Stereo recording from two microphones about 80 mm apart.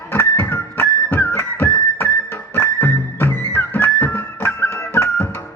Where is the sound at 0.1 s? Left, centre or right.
Left.